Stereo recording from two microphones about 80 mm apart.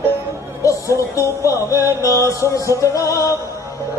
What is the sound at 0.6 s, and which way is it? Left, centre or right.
Music, left.